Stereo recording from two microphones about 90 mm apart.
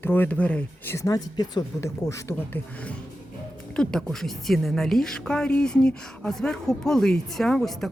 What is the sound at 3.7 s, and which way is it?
A woman's voice, 10° left (ahead or behind).